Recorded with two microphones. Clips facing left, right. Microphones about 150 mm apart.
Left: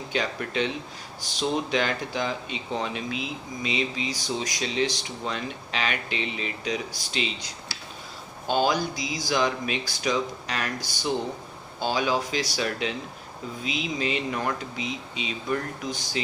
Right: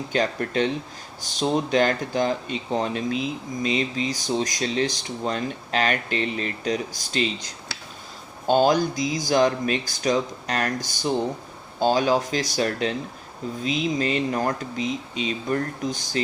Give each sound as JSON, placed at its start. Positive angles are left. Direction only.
{"t": 0.1, "sound": "speech", "side_deg": -45}
{"t": 8.4, "sound": "speech", "side_deg": -45}
{"t": 11.8, "sound": "speech", "side_deg": -45}